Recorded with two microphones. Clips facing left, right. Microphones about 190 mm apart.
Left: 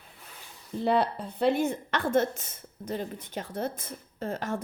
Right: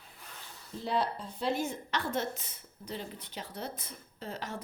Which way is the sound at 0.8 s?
60° left (ahead or behind).